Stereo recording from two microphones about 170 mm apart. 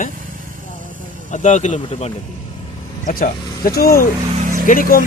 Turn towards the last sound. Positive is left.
turn(degrees=55)  # may be behind; listen again after turning